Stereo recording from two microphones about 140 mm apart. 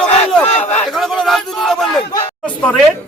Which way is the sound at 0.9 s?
Centre (ahead or behind).